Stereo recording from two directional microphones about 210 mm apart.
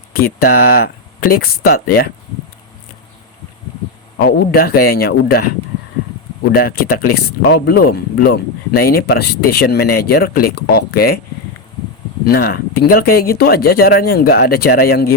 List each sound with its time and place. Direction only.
0.1 s speech: 45° left (ahead or behind)
4.2 s speech: 45° left (ahead or behind)
6.5 s speech: 45° left (ahead or behind)
12.2 s speech: 45° left (ahead or behind)